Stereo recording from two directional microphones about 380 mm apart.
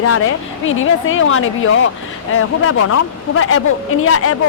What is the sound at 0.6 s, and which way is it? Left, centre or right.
A woman's voice, left.